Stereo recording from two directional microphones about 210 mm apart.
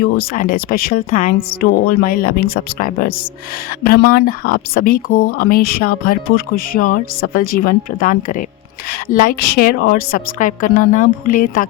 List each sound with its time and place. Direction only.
0.0 s speech: 45° left (ahead or behind)